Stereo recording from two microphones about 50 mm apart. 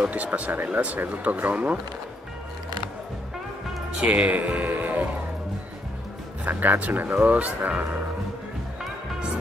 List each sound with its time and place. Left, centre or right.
0.1 s speech: right
4.0 s speech: right
4.4 s music: right
6.4 s speech: right